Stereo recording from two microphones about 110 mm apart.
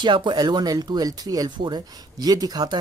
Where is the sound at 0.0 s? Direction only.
45° right (ahead or behind).